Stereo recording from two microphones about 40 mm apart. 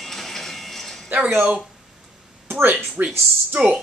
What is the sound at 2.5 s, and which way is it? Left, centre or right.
Speech, right.